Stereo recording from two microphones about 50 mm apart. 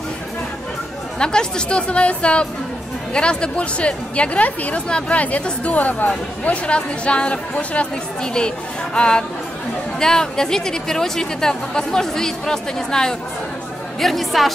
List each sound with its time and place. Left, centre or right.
1.2 s a woman's voice: centre